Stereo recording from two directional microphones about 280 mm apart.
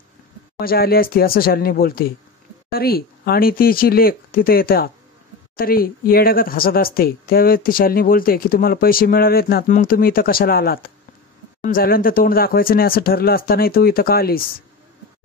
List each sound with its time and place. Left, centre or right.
0.6 s speech: left